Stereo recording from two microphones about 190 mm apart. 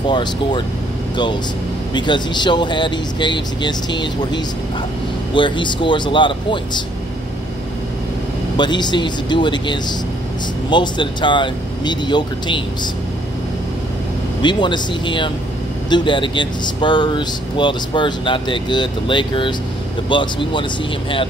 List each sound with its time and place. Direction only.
0.0 s speech: 25° left (ahead or behind)
2.0 s speech: 25° left (ahead or behind)
8.5 s speech: 25° left (ahead or behind)
14.4 s speech: 25° left (ahead or behind)